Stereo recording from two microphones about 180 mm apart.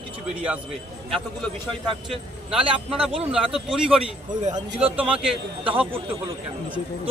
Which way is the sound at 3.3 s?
5° right (ahead or behind).